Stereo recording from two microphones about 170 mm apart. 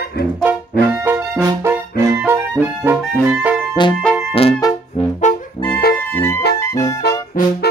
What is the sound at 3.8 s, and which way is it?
Music, 25° left (ahead or behind).